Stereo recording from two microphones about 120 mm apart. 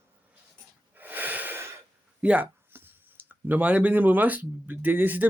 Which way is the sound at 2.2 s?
10° right (ahead or behind).